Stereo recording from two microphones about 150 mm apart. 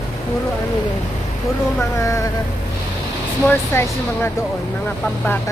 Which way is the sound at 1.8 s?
20° left (ahead or behind).